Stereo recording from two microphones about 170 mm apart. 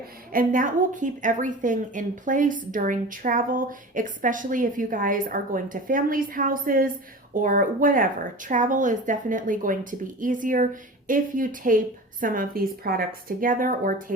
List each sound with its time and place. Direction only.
0.3 s a woman's voice: 55° right (ahead or behind)